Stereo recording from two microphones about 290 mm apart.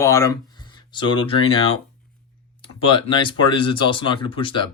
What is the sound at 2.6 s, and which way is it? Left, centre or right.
Speech, centre.